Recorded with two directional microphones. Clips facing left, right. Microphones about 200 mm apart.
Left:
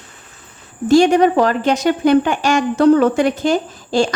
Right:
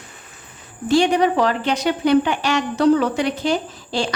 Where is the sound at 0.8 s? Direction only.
45° left (ahead or behind).